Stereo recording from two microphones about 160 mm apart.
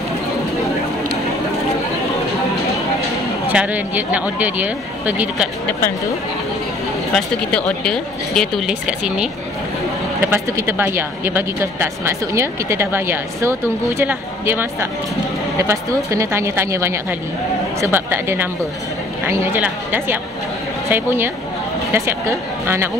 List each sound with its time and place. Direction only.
3.4 s speech: 10° right (ahead or behind)
7.2 s speech: 5° left (ahead or behind); by 22.8 s 15° right (ahead or behind)